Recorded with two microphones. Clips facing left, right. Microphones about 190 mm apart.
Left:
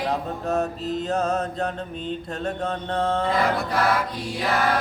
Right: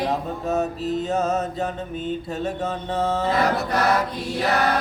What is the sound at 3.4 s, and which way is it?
Choir, 40° right (ahead or behind).